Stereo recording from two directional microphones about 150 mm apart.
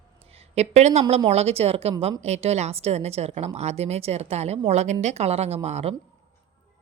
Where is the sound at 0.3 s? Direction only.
45° right (ahead or behind).